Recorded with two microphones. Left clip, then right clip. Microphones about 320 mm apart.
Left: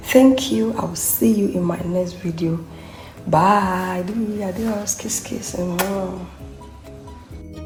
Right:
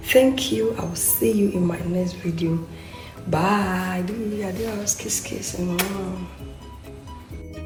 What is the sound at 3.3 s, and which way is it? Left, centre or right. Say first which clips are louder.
Speech: left 7 dB; left.